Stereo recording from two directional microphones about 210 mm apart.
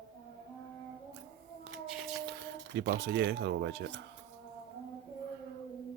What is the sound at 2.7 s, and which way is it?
Speech, 50° right (ahead or behind).